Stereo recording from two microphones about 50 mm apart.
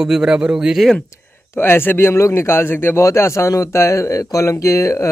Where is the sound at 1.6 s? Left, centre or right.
Left.